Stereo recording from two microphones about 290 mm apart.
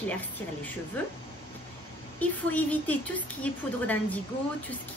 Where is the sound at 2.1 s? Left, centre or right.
Centre.